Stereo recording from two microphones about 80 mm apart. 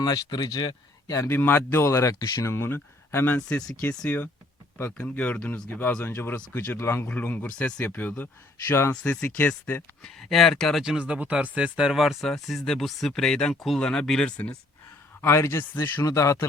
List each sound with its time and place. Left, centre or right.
0.0 s speech: left
1.1 s speech: left
2.1 s speech: left
2.4 s speech: left
10.0 s speech: centre
10.8 s speech: centre
15.2 s speech: left
15.7 s speech: left
16.0 s speech: left